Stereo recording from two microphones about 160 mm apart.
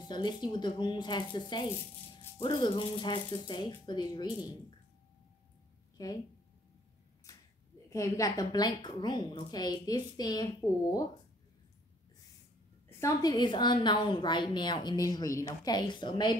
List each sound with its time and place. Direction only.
0.1 s a woman's voice: 30° left (ahead or behind)
6.0 s a woman's voice: 25° left (ahead or behind)
7.3 s a sound: 20° left (ahead or behind)
7.9 s a woman's voice: 20° left (ahead or behind)
13.0 s a woman's voice: 25° left (ahead or behind)